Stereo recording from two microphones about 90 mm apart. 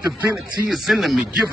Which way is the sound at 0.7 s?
Centre (ahead or behind).